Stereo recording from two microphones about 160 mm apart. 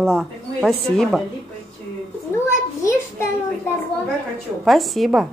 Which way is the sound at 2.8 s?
15° left (ahead or behind).